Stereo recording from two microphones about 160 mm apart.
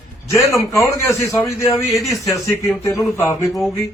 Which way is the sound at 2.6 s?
15° left (ahead or behind).